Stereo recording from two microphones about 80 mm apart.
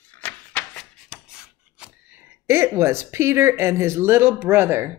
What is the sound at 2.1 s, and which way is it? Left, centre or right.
A woman's voice, right.